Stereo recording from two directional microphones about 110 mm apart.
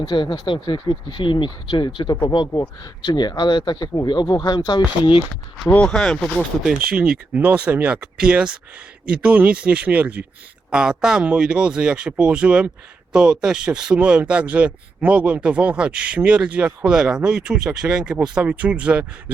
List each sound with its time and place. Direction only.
0.0 s speech: 45° left (ahead or behind)
5.6 s speech: 10° left (ahead or behind); by 19.0 s 10° right (ahead or behind)